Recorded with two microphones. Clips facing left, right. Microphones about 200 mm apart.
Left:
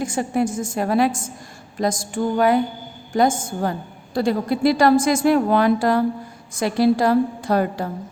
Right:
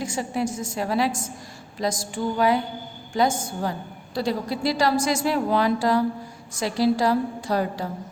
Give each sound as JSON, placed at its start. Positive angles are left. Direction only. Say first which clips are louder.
{"t": 0.0, "sound": "a woman's voice", "louder": "left 5 dB", "side_deg": 50}